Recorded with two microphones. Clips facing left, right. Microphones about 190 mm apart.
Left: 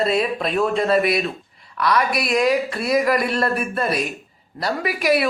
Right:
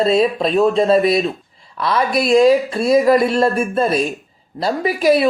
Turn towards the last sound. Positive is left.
turn(degrees=-25)  # may be behind; listen again after turning